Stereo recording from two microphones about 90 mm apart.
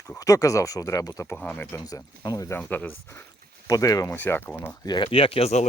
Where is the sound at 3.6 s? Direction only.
40° left (ahead or behind).